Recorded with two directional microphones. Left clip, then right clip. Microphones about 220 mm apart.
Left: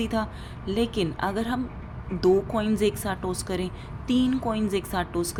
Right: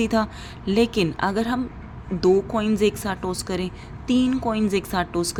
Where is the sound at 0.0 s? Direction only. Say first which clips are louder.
Right 6 dB; 20° right (ahead or behind).